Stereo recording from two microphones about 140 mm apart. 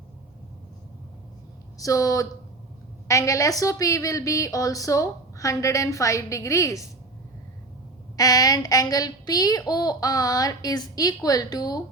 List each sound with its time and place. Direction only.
1.8 s a woman's voice: 25° left (ahead or behind)
8.1 s a woman's voice: 25° left (ahead or behind)